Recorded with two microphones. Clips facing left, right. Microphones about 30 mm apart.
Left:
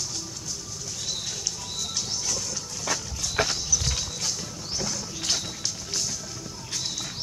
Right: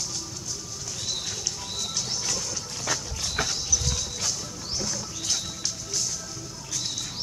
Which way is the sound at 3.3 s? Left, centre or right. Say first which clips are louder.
Left 3 dB; left.